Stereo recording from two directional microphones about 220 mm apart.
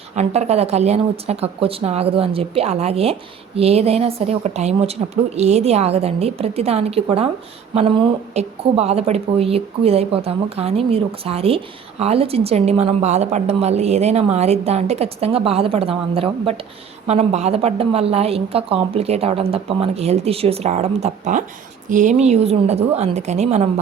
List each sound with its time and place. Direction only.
0.2 s a woman's voice: 30° right (ahead or behind)